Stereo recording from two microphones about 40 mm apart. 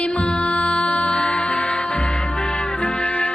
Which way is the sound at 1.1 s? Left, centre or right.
Left.